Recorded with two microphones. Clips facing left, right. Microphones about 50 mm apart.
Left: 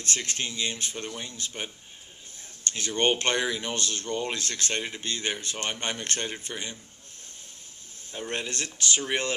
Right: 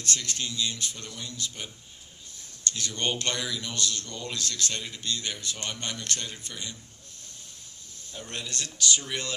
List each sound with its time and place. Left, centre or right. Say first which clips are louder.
0.0 s speech: left 1 dB; left
8.1 s speech: left 5 dB; left